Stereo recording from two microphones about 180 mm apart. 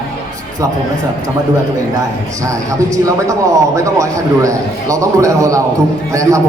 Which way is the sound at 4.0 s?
15° right (ahead or behind).